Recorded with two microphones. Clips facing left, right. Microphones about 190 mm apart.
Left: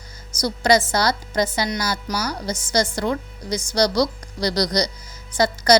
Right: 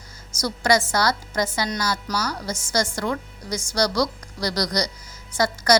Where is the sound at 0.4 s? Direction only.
20° left (ahead or behind).